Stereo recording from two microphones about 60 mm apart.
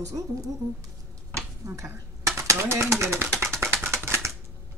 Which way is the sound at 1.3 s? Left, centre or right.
Right.